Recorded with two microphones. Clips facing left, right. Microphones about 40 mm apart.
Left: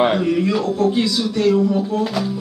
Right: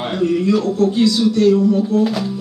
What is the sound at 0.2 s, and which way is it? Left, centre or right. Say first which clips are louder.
A man's voice: right 2 dB; centre.